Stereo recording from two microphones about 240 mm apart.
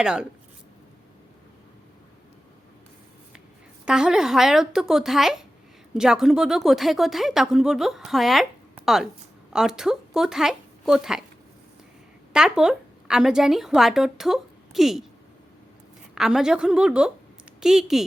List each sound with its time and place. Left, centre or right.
0.0 s a woman's voice: centre
3.8 s a woman's voice: centre
12.3 s speech: centre
16.1 s a woman's voice: centre